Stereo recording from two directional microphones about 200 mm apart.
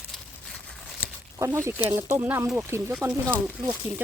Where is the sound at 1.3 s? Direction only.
15° right (ahead or behind).